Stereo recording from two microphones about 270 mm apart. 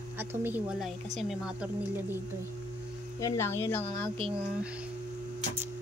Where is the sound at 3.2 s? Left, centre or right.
Centre.